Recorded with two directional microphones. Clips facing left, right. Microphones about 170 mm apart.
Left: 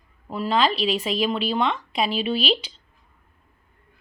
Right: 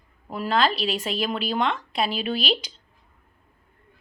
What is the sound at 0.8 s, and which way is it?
Speech, 45° right (ahead or behind).